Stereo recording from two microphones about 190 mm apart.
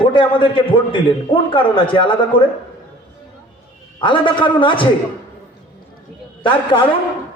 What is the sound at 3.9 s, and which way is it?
Speech, 25° left (ahead or behind).